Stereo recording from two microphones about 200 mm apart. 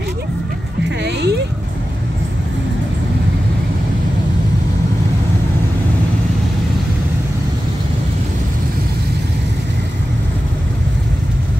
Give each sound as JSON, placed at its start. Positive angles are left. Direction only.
{"t": 0.8, "sound": "music", "side_deg": -60}